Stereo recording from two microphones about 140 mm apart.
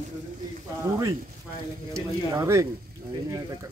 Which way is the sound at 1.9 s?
20° right (ahead or behind).